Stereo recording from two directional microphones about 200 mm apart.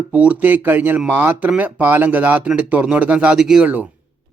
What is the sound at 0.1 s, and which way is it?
A man's voice, 5° right (ahead or behind).